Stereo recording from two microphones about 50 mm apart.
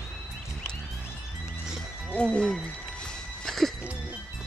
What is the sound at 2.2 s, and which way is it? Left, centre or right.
Speech, left.